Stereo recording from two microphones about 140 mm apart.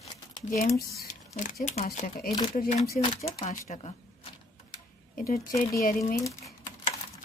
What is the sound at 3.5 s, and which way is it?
Speech, 55° left (ahead or behind).